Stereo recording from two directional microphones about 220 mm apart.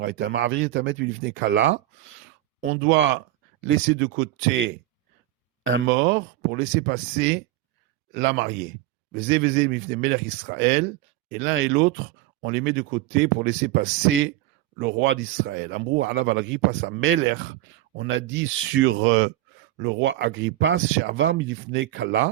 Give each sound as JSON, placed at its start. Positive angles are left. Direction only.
{"t": 0.2, "sound": "speech", "side_deg": -50}
{"t": 2.8, "sound": "speech", "side_deg": -55}